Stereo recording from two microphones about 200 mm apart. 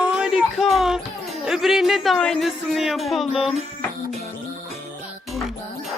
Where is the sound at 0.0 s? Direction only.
5° right (ahead or behind).